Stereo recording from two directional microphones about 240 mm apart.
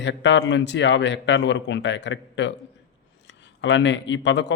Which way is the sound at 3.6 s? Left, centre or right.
Left.